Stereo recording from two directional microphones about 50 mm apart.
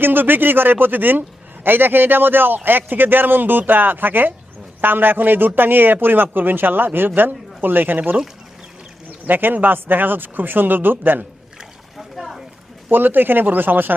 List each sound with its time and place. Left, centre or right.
0.0 s a man's voice: right
11.9 s boat: centre
12.9 s a man's voice: right